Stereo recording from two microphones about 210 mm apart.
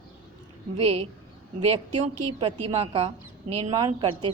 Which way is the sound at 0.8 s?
25° right (ahead or behind).